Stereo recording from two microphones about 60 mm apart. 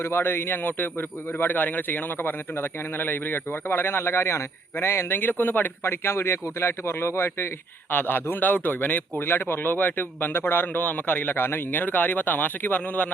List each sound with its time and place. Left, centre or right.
0.0 s a man's voice: left
7.9 s a man's voice: left